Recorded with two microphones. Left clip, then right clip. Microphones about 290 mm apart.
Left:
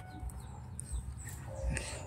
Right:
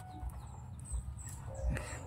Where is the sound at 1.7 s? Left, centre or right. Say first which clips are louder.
Left 2 dB; centre.